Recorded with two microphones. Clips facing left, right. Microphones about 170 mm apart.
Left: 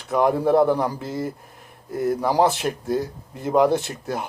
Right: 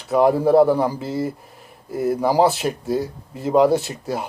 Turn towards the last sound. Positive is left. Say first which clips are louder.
# right 2 dB
turn(degrees=-5)  # may be behind; listen again after turning